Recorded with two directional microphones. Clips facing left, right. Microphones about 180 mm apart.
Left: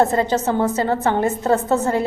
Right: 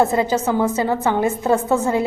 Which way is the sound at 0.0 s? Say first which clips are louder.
Even; 15° right (ahead or behind).